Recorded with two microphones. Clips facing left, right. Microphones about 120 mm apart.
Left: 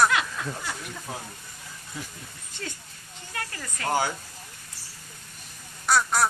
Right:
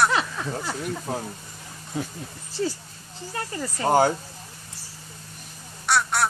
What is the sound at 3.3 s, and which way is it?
Speech, 25° right (ahead or behind).